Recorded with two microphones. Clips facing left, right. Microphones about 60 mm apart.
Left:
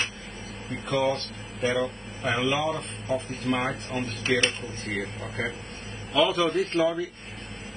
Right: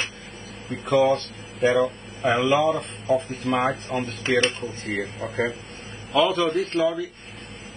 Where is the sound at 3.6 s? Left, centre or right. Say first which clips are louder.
Right 5 dB; right.